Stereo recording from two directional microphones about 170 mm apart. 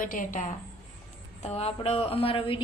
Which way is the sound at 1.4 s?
40° left (ahead or behind).